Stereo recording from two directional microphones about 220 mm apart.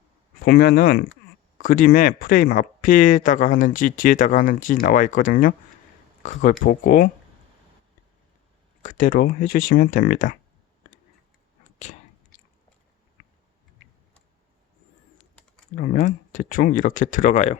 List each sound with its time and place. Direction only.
0.4 s speech: 40° left (ahead or behind)
8.8 s speech: 35° left (ahead or behind)
15.7 s speech: 35° left (ahead or behind)